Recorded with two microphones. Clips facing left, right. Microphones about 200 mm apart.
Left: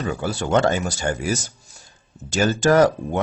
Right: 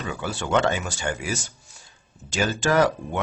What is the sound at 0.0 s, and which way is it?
Speech, 40° left (ahead or behind).